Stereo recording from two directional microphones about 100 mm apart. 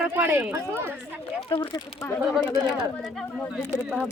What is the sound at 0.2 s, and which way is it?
Speech, 15° right (ahead or behind).